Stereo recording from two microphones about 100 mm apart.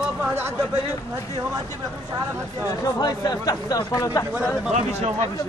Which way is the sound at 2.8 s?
40° left (ahead or behind).